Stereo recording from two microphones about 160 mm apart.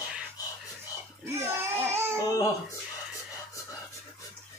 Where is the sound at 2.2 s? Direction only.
20° left (ahead or behind).